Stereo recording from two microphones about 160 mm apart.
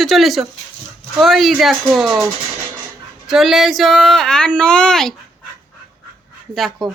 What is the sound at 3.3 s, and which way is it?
Speech, centre (ahead or behind).